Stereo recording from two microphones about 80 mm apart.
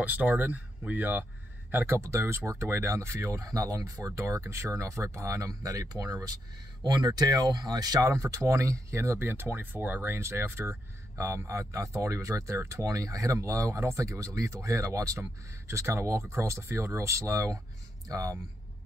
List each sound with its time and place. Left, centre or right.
0.0 s speech: right
8.0 s speech: right